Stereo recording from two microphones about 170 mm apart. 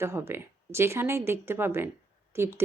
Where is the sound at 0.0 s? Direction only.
15° right (ahead or behind).